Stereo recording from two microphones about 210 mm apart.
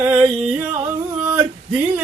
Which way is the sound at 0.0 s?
10° right (ahead or behind).